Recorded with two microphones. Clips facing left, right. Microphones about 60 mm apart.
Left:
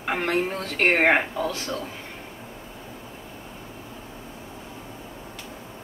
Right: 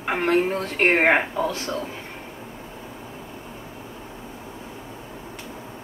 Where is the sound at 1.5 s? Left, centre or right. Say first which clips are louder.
Right 2 dB; right.